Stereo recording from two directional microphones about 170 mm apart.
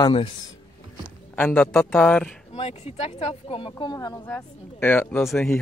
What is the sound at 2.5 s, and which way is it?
Speech, 35° left (ahead or behind).